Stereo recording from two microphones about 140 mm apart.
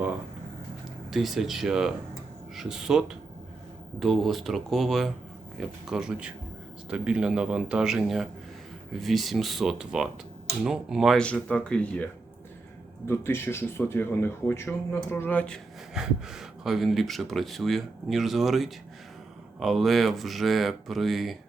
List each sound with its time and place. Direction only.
1.1 s speech: centre (ahead or behind)
13.1 s speech: 15° left (ahead or behind)
16.0 s speech: 5° right (ahead or behind)